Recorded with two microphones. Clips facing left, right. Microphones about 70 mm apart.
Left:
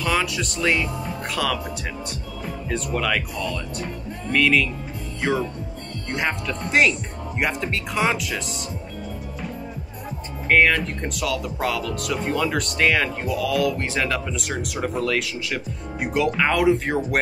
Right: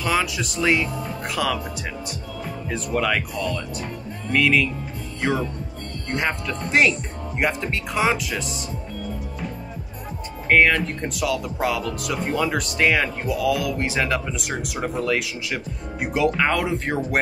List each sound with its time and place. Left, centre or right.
0.0 s speech: centre
10.5 s speech: centre